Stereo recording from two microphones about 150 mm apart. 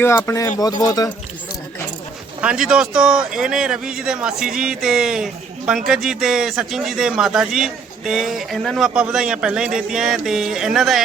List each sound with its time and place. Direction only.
0.3 s speech: 20° left (ahead or behind)
2.4 s speech: 5° right (ahead or behind)